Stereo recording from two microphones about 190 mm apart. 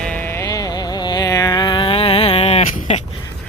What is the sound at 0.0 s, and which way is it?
Music, 10° left (ahead or behind).